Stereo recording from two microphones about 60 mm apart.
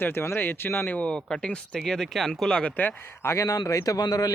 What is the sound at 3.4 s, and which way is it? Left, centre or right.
Speech, left.